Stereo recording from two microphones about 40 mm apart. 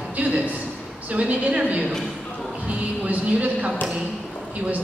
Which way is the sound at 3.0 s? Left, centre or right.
Right.